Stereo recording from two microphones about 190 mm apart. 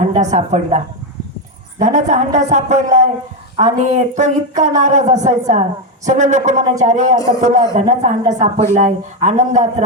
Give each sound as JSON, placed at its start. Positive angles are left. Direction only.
{"t": 0.1, "sound": "speech", "side_deg": -35}
{"t": 1.8, "sound": "speech", "side_deg": -40}